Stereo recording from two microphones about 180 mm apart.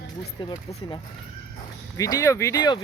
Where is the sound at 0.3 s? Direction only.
25° left (ahead or behind).